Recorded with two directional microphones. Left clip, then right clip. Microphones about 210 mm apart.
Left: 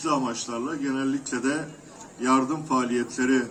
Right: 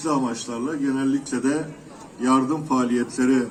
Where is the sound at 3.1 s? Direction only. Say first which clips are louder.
Right 2 dB; 25° right (ahead or behind).